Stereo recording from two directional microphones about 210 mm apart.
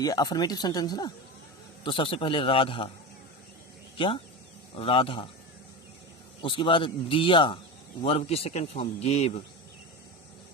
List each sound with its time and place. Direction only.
0.0 s speech: 15° left (ahead or behind)
3.9 s speech: 25° left (ahead or behind)
6.4 s speech: 25° left (ahead or behind)